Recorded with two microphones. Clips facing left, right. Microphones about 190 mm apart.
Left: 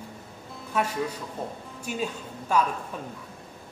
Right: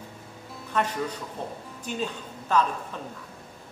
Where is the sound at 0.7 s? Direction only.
10° left (ahead or behind).